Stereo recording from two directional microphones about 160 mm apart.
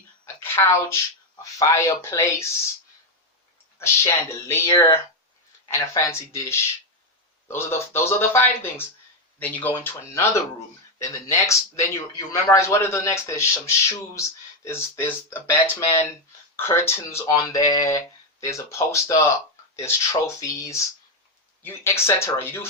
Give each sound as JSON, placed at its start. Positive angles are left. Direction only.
{"t": 0.4, "sound": "speech", "side_deg": 15}
{"t": 3.8, "sound": "a man's voice", "side_deg": 15}